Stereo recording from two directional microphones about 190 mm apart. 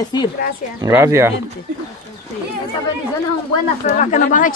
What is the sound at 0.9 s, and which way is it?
Speech, 15° right (ahead or behind).